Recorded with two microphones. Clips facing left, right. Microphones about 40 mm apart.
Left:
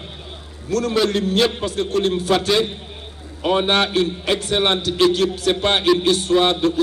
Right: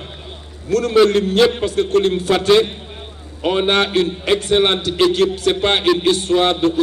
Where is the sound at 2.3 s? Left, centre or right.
Right.